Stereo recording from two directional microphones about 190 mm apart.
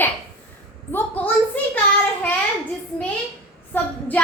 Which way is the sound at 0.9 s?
10° left (ahead or behind).